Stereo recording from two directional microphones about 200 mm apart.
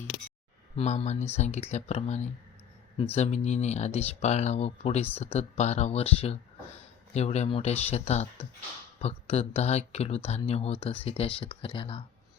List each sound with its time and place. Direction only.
0.8 s speech: 35° left (ahead or behind)